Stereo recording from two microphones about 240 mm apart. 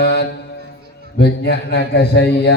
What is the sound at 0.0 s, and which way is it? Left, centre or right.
Mantra, left.